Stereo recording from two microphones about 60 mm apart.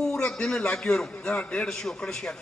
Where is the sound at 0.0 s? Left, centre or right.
Centre.